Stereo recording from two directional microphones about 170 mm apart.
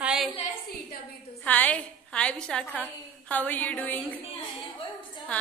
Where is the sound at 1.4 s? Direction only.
10° left (ahead or behind).